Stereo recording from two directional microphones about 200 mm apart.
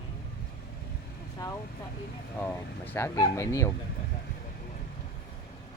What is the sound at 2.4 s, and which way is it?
Speech, 10° left (ahead or behind).